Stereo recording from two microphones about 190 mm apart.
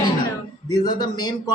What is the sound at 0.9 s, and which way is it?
Speech, 20° left (ahead or behind).